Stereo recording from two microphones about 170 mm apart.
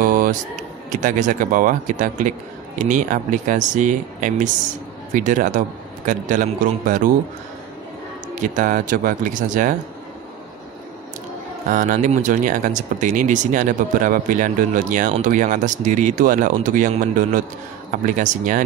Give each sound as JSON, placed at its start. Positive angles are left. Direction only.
{"t": 0.0, "sound": "a sound", "side_deg": -55}
{"t": 0.8, "sound": "speech", "side_deg": -50}
{"t": 8.4, "sound": "speech", "side_deg": -50}
{"t": 11.7, "sound": "speech", "side_deg": -50}